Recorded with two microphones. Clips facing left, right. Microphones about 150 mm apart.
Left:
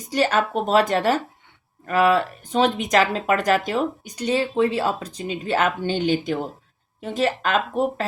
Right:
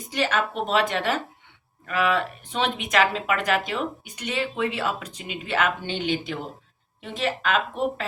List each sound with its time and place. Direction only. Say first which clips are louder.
0.1 s speech: left 5 dB; 40° left (ahead or behind)